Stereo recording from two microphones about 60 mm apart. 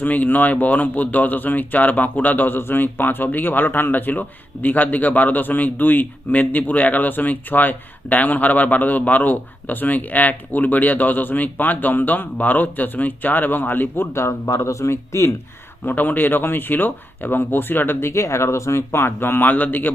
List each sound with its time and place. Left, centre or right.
0.0 s speech: left
15.8 s speech: left
18.1 s a man's voice: left